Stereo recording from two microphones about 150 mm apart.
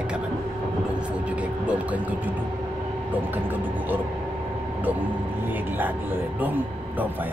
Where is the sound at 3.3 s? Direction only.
10° right (ahead or behind).